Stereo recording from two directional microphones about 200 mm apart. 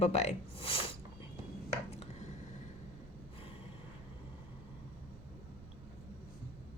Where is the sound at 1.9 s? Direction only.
35° left (ahead or behind).